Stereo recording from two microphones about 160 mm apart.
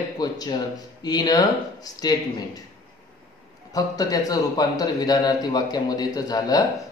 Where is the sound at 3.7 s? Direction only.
25° left (ahead or behind).